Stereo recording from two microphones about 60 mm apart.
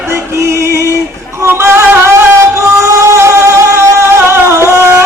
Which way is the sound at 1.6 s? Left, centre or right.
Right.